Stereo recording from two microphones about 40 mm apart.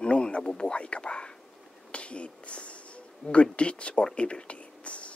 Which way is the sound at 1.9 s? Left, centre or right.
Left.